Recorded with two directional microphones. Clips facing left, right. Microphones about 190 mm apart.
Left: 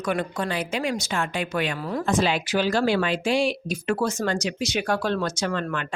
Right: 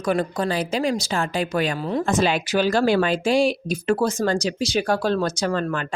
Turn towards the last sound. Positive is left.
turn(degrees=-35)  # may be behind; listen again after turning